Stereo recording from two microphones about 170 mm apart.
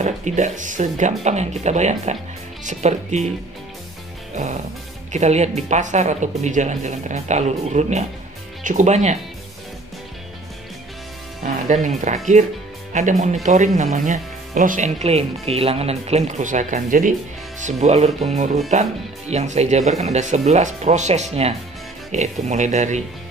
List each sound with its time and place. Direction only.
0.0 s speech: 45° right (ahead or behind)
4.4 s speech: 40° right (ahead or behind)
11.4 s speech: 45° right (ahead or behind)